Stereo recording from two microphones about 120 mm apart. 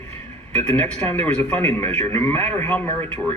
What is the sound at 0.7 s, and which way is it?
A man's voice, 15° left (ahead or behind).